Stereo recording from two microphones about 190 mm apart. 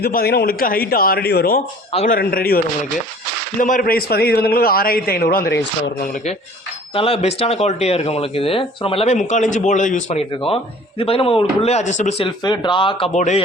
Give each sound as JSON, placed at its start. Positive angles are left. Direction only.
{"t": 0.0, "sound": "a man's voice", "side_deg": 55}
{"t": 1.9, "sound": "speech", "side_deg": 35}
{"t": 2.1, "sound": "a man's voice", "side_deg": 50}
{"t": 3.6, "sound": "a man's voice", "side_deg": 45}
{"t": 6.9, "sound": "speech", "side_deg": 30}
{"t": 13.1, "sound": "speech", "side_deg": 40}